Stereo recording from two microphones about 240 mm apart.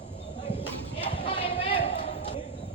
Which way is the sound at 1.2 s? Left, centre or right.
Left.